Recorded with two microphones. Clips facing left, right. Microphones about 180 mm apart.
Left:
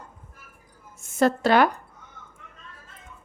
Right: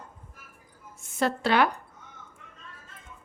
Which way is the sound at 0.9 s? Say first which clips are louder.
Left 6 dB; 45° left (ahead or behind).